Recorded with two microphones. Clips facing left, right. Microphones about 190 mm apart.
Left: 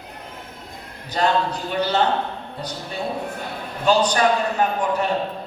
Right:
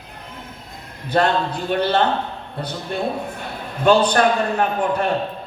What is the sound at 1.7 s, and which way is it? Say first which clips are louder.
Speech: right 7 dB; 55° right (ahead or behind).